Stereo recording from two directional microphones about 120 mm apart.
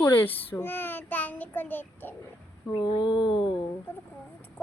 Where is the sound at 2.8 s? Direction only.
40° left (ahead or behind).